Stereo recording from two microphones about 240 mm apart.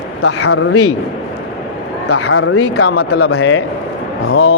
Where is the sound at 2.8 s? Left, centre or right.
Left.